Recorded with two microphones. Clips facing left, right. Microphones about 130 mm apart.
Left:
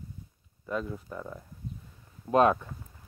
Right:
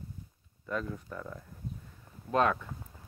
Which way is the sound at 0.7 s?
10° left (ahead or behind).